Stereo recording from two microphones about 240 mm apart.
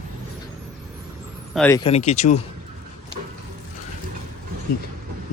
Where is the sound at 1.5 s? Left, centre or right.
Centre.